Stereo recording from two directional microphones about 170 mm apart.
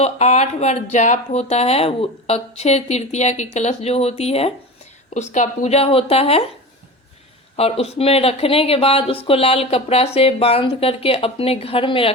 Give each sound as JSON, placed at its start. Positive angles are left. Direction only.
{"t": 0.0, "sound": "speech", "side_deg": 40}
{"t": 7.5, "sound": "speech", "side_deg": 35}